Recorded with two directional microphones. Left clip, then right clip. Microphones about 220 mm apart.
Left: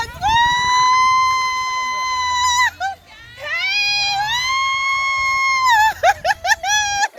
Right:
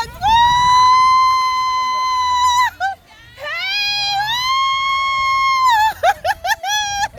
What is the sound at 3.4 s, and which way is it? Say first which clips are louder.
Cat: left 1 dB; 20° right (ahead or behind).